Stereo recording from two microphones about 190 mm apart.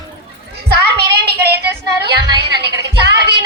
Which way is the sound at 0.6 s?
60° right (ahead or behind).